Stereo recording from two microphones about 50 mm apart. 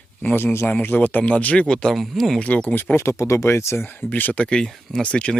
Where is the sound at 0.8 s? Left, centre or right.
Left; by 2.0 s centre.